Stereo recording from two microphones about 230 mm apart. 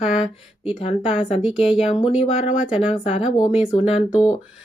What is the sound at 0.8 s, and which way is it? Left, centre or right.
Speech, left.